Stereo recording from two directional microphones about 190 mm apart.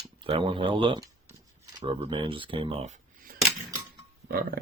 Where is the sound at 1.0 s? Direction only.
15° right (ahead or behind).